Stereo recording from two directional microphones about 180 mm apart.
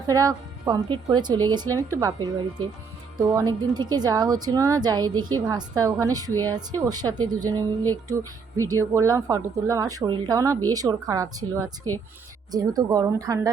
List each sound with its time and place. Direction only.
0.1 s a woman's voice: 20° right (ahead or behind)